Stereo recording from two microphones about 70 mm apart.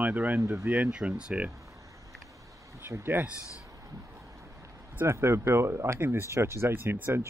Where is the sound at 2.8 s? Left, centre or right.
Right.